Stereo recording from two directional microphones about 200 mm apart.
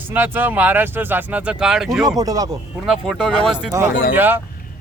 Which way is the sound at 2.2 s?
20° right (ahead or behind).